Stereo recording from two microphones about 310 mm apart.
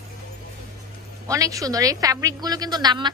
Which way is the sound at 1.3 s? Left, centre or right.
Centre.